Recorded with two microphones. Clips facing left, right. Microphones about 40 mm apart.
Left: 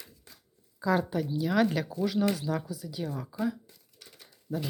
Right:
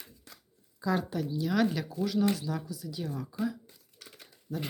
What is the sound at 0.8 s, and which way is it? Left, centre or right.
Speech, centre.